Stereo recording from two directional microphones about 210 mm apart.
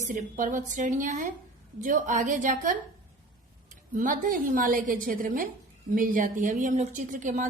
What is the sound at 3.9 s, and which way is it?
A woman's voice, 40° right (ahead or behind).